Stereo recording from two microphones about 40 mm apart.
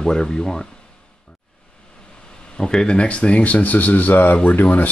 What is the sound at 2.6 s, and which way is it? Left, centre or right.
Speech, centre.